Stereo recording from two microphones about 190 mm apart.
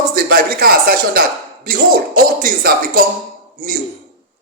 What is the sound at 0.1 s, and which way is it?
Speech, 50° right (ahead or behind).